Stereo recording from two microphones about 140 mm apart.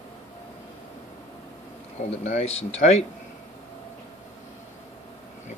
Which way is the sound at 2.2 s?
50° left (ahead or behind).